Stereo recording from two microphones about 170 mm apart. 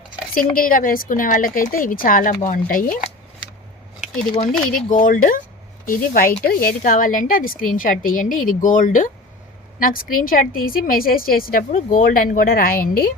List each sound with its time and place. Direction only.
0.5 s a woman's voice: 55° left (ahead or behind)
4.7 s a woman's voice: 50° left (ahead or behind)